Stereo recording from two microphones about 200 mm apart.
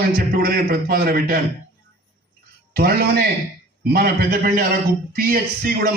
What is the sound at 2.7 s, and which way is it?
A man's voice, 50° right (ahead or behind).